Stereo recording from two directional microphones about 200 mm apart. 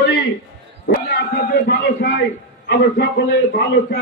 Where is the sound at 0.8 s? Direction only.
60° left (ahead or behind).